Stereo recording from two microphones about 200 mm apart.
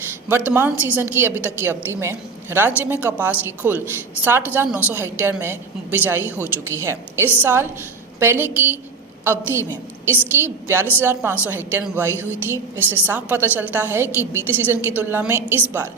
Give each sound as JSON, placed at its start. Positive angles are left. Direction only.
{"t": 0.3, "sound": "a woman's voice", "side_deg": -10}